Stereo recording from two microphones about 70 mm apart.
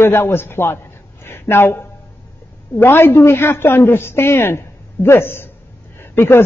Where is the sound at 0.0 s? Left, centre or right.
Left.